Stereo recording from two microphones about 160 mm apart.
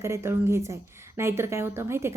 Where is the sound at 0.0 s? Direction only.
15° right (ahead or behind).